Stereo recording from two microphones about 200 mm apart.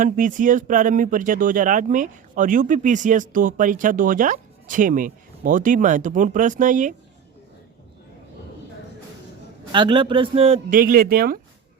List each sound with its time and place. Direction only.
0.0 s speech: 40° right (ahead or behind)
9.7 s a man's voice: 25° right (ahead or behind)
10.8 s speech: 45° right (ahead or behind)